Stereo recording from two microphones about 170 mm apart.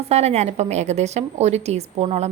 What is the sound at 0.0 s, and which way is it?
A woman's voice, 40° right (ahead or behind).